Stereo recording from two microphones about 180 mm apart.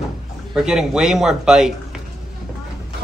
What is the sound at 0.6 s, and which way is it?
Speech, 5° right (ahead or behind).